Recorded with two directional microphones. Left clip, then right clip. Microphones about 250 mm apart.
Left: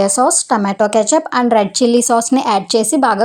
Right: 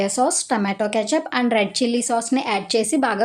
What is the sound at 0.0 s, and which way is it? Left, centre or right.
Speech, centre.